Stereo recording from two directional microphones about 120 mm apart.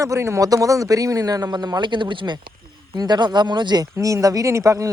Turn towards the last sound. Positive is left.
turn(degrees=-25)  # may be behind; listen again after turning